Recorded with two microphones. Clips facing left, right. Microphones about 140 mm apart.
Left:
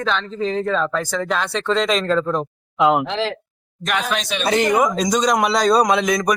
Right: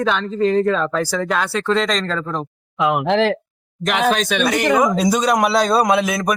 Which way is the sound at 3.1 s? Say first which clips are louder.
Right 7 dB; 60° right (ahead or behind).